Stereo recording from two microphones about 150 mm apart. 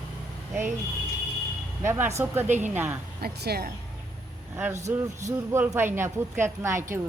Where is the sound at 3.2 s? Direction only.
90° right.